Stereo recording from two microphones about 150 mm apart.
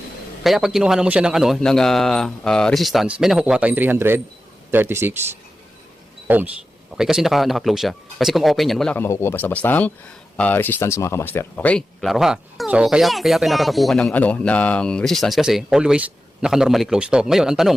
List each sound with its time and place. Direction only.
0.4 s speech: centre (ahead or behind)
9.0 s speech: 15° left (ahead or behind); by 17.7 s 5° right (ahead or behind)